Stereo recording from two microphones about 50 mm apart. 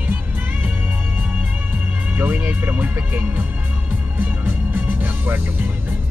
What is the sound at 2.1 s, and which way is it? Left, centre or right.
Music, right.